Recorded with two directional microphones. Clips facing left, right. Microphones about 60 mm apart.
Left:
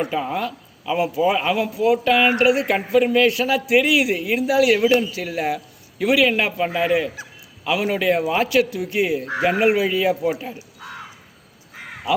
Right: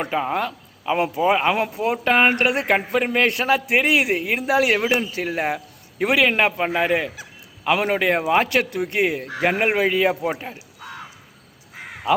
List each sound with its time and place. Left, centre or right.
0.0 s speech: right